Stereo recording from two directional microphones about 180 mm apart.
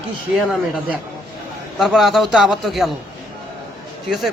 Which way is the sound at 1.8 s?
Centre (ahead or behind).